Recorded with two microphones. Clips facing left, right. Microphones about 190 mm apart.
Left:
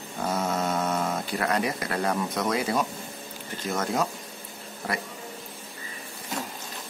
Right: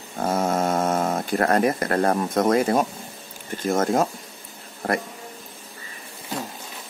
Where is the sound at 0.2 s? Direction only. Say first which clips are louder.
Right 5 dB; 50° right (ahead or behind).